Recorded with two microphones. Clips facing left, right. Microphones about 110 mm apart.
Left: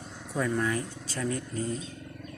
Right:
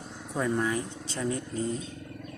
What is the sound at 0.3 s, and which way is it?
Speech, 15° right (ahead or behind).